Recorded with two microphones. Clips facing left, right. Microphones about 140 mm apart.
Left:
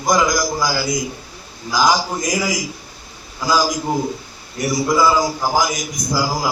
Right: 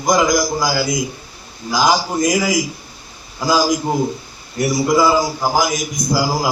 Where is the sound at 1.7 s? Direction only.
10° right (ahead or behind).